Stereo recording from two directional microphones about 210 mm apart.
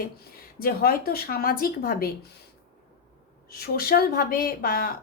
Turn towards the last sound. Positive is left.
turn(degrees=45)  # may be behind; listen again after turning